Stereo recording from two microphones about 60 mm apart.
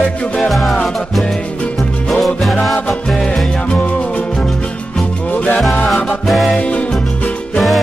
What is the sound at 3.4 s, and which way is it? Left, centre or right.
Music, centre.